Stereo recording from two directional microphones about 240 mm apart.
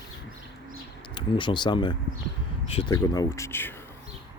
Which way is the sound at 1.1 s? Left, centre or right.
Centre.